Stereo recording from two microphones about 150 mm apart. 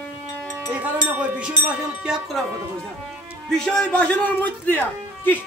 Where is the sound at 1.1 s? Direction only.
10° right (ahead or behind).